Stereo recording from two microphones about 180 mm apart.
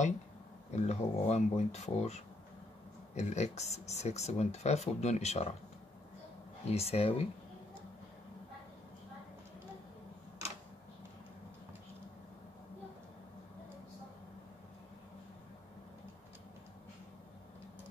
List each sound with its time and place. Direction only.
0.7 s speech: 40° left (ahead or behind)
6.7 s speech: 35° left (ahead or behind)